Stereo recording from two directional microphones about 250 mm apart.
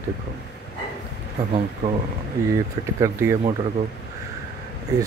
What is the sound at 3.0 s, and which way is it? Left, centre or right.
Speech, centre.